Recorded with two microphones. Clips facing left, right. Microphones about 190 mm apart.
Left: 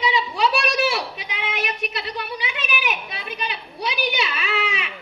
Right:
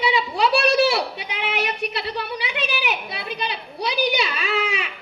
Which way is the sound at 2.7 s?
30° right (ahead or behind).